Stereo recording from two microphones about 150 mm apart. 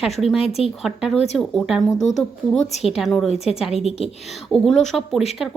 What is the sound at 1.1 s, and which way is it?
Speech, 45° left (ahead or behind).